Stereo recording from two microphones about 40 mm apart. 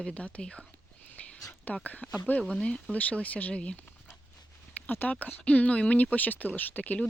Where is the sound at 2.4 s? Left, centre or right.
Left.